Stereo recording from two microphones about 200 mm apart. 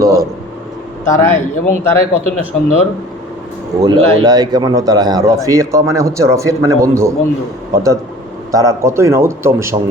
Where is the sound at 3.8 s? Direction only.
20° right (ahead or behind).